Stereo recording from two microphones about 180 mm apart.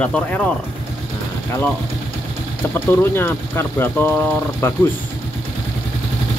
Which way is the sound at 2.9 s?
10° left (ahead or behind).